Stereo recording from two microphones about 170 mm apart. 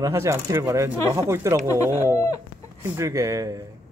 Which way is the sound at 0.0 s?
15° right (ahead or behind).